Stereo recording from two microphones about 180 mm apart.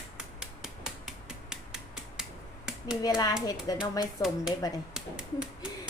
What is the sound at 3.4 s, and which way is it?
Speech, 20° left (ahead or behind).